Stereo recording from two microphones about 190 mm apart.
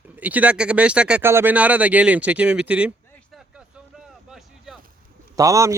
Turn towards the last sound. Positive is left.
turn(degrees=-15)  # may be behind; listen again after turning